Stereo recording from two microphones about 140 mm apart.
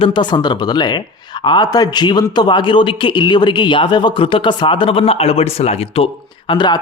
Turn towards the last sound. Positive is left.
turn(degrees=35)  # may be behind; listen again after turning